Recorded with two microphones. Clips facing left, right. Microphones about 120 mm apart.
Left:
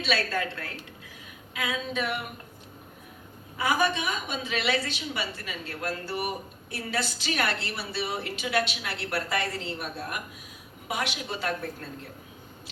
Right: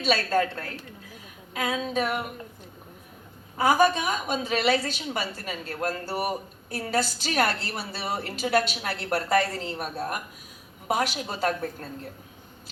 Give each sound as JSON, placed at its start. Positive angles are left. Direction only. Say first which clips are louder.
{"t": 0.0, "sound": "a woman's voice", "louder": "right 5 dB", "side_deg": -45}
{"t": 3.6, "sound": "a woman's voice", "louder": "right 5 dB", "side_deg": -40}